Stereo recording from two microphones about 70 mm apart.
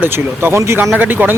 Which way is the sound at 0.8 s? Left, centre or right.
Right.